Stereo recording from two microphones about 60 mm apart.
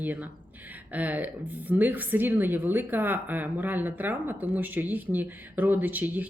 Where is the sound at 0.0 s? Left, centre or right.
Right.